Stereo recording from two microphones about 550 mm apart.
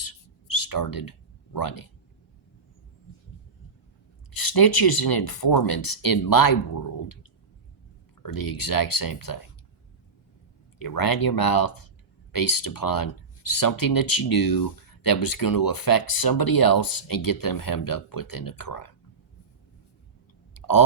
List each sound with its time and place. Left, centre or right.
0.0 s a sound: left
1.5 s speech: left
4.3 s speech: left
8.2 s speech: left
10.8 s speech: left
20.5 s clicking: left